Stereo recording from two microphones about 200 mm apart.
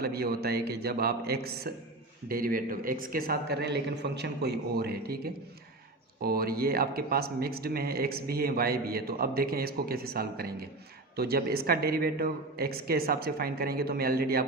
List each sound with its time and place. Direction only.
0.0 s speech: 50° right (ahead or behind)